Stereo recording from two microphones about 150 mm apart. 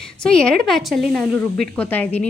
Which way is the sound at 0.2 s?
5° left (ahead or behind).